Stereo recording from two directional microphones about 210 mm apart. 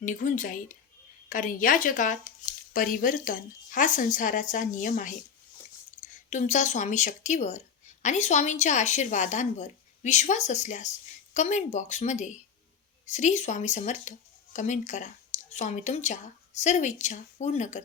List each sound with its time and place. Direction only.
0.0 s speech: 40° left (ahead or behind)
6.3 s speech: 35° left (ahead or behind)